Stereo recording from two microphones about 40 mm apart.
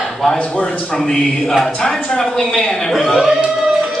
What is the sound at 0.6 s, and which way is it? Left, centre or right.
Speech, left.